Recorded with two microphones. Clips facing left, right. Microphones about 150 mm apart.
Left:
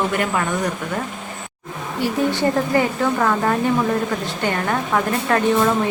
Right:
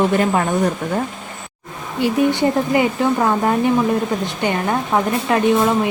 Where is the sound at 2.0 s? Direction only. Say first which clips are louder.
Right 3 dB; 15° right (ahead or behind).